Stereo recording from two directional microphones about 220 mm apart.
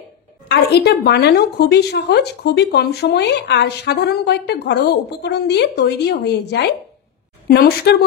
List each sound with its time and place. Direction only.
0.5 s a woman's voice: 50° left (ahead or behind)